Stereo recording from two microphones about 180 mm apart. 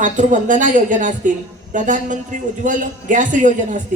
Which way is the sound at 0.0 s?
45° right (ahead or behind).